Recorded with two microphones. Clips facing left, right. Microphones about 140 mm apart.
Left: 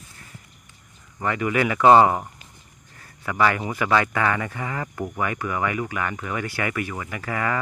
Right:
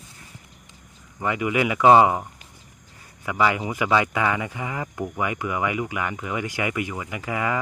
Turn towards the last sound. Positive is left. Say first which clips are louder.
# even
turn(degrees=-15)  # may be behind; listen again after turning